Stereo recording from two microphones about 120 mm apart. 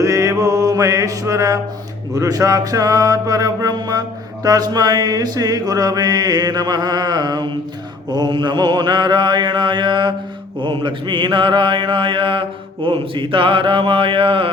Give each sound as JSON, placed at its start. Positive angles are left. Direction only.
{"t": 0.0, "sound": "mantra", "side_deg": -25}
{"t": 2.1, "sound": "a sound", "side_deg": -30}
{"t": 10.6, "sound": "mantra", "side_deg": -40}